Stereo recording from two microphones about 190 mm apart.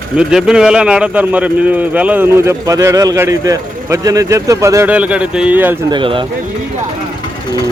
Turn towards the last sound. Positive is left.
turn(degrees=-25)  # may be behind; listen again after turning